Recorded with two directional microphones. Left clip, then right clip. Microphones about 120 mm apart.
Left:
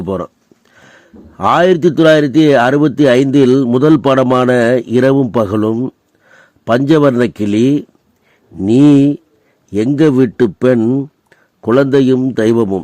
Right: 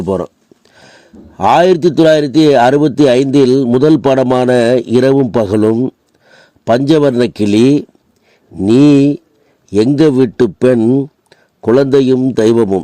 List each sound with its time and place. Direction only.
0.0 s a man's voice: 20° right (ahead or behind)
5.2 s a man's voice: 15° right (ahead or behind)